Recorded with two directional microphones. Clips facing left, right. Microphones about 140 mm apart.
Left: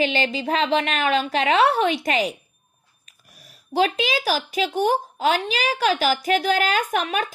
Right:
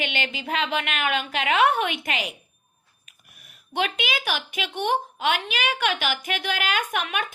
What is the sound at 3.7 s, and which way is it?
A woman's voice, 35° left (ahead or behind).